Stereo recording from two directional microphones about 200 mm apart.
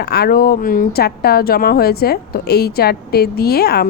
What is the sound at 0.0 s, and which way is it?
Speech, 50° left (ahead or behind).